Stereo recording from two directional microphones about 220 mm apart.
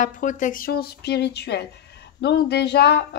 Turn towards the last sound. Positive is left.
turn(degrees=50)  # may be behind; listen again after turning